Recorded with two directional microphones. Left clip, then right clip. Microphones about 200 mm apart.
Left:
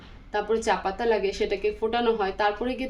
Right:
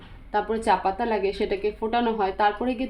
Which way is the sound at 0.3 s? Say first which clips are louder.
Right 2 dB; 35° right (ahead or behind).